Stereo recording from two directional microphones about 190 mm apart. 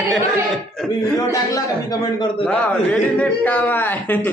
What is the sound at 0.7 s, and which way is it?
Speech, centre (ahead or behind).